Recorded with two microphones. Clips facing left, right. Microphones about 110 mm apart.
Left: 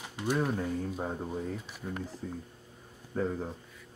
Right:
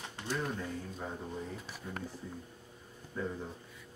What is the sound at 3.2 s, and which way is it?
Speech, 45° left (ahead or behind).